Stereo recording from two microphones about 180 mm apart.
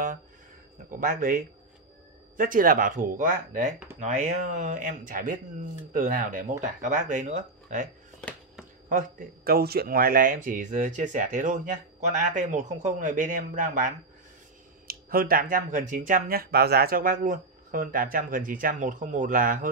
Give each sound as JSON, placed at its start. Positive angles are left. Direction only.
{"t": 0.8, "sound": "speech", "side_deg": -50}
{"t": 8.2, "sound": "a sound", "side_deg": 5}
{"t": 8.8, "sound": "speech", "side_deg": -55}